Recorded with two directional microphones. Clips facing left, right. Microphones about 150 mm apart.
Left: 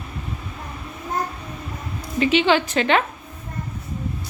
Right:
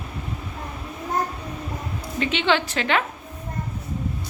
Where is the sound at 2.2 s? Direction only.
10° left (ahead or behind).